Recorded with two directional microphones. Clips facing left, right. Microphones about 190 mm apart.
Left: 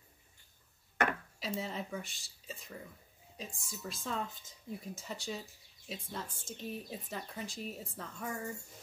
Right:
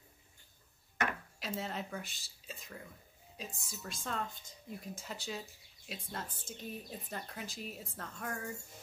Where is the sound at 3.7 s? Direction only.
Centre (ahead or behind).